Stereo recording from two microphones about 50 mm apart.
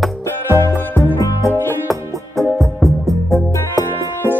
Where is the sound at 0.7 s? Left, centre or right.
Left.